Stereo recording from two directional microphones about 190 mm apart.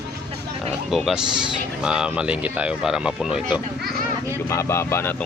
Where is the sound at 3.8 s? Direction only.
55° right (ahead or behind).